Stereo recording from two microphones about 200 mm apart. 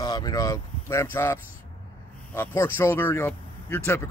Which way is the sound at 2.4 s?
10° left (ahead or behind).